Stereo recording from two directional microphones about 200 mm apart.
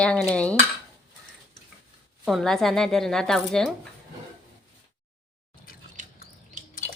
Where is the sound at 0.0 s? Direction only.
5° left (ahead or behind).